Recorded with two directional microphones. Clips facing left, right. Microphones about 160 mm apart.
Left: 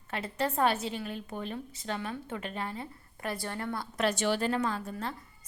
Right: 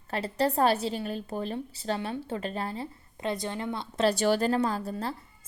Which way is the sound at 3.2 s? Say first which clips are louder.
Right 4 dB; 20° right (ahead or behind).